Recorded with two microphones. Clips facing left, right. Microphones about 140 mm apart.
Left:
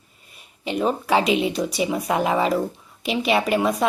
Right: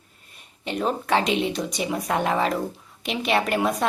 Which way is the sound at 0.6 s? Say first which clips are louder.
Left 3 dB; 5° left (ahead or behind).